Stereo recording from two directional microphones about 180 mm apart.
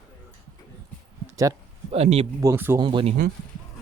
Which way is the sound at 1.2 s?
20° right (ahead or behind).